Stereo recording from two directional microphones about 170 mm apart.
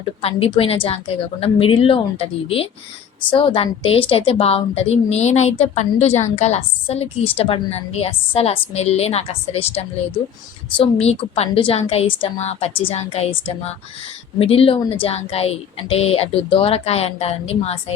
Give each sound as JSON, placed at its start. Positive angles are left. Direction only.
{"t": 0.2, "sound": "a woman's voice", "side_deg": 35}